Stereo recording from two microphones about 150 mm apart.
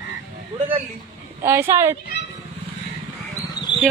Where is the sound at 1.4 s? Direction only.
15° right (ahead or behind).